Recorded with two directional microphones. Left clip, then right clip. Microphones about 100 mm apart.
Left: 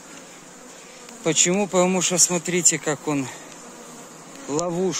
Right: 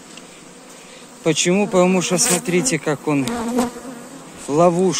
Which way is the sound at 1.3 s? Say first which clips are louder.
Right 3 dB; centre (ahead or behind).